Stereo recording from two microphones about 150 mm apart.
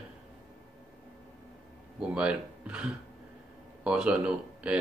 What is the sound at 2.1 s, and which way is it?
Speech, 5° right (ahead or behind).